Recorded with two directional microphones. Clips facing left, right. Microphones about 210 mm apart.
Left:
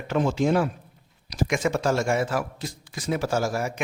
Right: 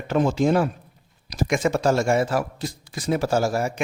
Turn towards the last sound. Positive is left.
turn(degrees=-30)  # may be behind; listen again after turning